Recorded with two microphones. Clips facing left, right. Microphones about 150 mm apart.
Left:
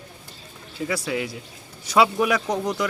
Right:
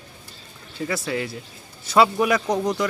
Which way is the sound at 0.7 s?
10° left (ahead or behind).